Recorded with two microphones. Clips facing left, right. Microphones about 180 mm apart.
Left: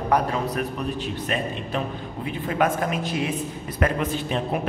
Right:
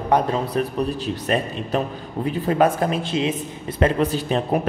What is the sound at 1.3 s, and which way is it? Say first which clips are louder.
A man's voice: right 7 dB; 40° right (ahead or behind).